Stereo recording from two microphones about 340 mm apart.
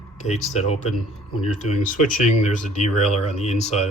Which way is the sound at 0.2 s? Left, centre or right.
Centre.